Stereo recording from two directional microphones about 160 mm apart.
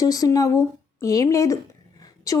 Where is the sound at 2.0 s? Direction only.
20° left (ahead or behind).